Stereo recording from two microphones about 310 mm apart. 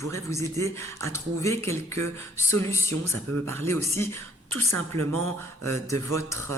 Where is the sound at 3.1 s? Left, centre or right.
Right.